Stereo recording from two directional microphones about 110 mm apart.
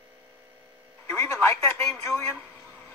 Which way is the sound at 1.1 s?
20° left (ahead or behind).